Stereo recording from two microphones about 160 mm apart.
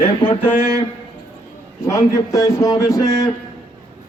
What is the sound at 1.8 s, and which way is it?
Speech, 20° left (ahead or behind).